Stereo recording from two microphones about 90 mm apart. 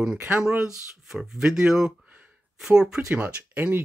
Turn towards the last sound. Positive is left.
turn(degrees=-20)  # may be behind; listen again after turning